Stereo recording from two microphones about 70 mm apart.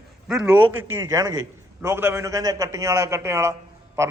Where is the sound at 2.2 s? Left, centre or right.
Right.